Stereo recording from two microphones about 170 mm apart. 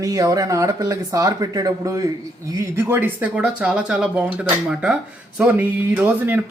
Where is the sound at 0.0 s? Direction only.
20° right (ahead or behind).